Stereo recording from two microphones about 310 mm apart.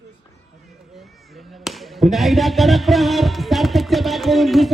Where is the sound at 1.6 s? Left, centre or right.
Centre.